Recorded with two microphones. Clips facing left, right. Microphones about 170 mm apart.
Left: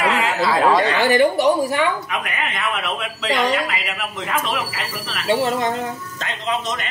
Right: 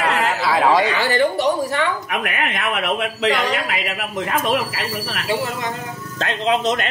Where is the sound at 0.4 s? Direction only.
Centre (ahead or behind).